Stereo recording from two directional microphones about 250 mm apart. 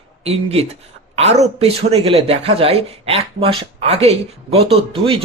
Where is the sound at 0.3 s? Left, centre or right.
Right.